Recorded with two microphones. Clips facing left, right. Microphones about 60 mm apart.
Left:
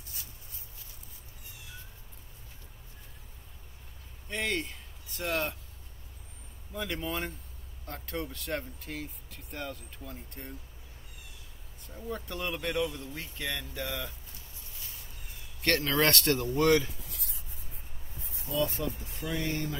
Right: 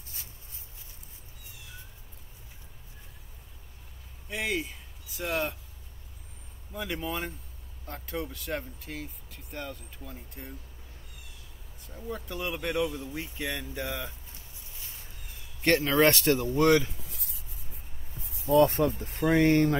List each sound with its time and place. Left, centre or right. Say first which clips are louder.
4.3 s speech: right 1 dB; centre
6.7 s speech: right 1 dB; centre
11.8 s speech: even; centre; by 14.1 s right
14.8 s a sound: right 1 dB; right
15.6 s speech: right 4 dB; centre
16.4 s speech: right 2 dB; right
17.1 s a sound: even; left
18.4 s speech: right 10 dB; right